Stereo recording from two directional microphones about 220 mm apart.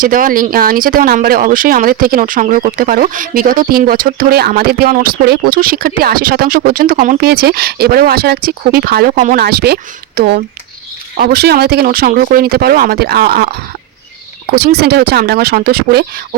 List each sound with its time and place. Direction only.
0.0 s speech: 40° right (ahead or behind)
14.5 s speech: 45° right (ahead or behind)